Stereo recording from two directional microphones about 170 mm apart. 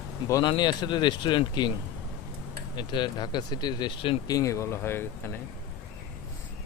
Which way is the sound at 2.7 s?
25° left (ahead or behind).